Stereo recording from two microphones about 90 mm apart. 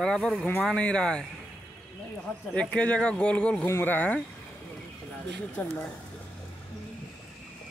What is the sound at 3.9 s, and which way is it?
Speech, 15° left (ahead or behind).